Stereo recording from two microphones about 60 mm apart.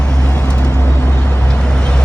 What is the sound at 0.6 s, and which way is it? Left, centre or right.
Vehicle, left.